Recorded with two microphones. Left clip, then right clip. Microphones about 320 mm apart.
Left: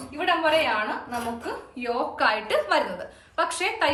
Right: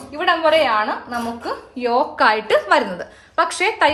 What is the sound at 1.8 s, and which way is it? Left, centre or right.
A woman's voice, centre.